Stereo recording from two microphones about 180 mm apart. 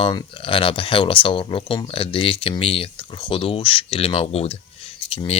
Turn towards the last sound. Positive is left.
turn(degrees=30)  # may be behind; listen again after turning